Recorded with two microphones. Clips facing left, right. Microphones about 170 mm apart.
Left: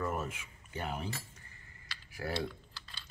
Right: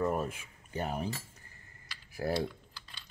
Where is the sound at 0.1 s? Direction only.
35° right (ahead or behind).